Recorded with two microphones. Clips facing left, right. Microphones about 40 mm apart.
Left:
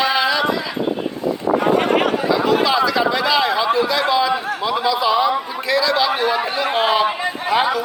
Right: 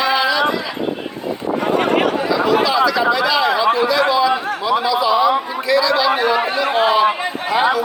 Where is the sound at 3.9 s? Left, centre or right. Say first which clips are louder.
Right 2 dB; left.